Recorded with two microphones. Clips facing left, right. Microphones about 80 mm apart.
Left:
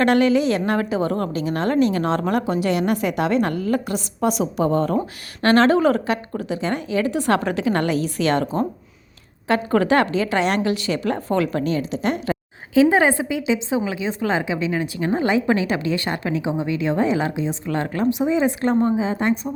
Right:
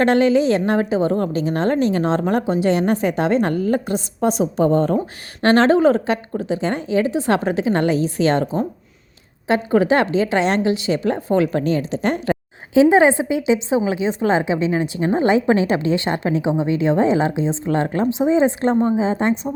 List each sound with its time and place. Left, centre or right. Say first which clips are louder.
0.0 s a woman's voice: right 2 dB; right
9.5 s a woman's voice: right 2 dB; centre
11.6 s speech: right 2 dB; right
12.7 s a woman's voice: right 3 dB; right